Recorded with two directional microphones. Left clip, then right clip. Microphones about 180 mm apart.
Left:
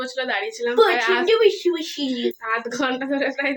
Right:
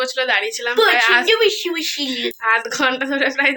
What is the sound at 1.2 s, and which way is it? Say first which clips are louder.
Speech: right 1 dB; 25° left (ahead or behind).